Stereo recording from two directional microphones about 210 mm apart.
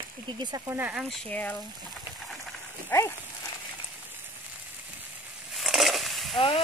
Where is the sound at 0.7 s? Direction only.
5° right (ahead or behind).